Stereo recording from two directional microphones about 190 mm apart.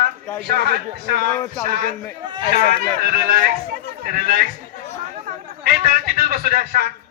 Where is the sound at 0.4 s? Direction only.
55° right (ahead or behind).